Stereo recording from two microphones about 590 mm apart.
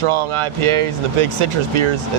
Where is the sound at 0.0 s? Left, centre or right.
Right.